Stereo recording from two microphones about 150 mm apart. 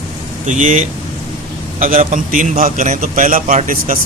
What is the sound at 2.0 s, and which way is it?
A man's voice, 60° right (ahead or behind).